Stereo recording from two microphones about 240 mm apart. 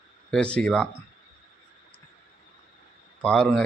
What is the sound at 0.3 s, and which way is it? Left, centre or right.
Speech, centre.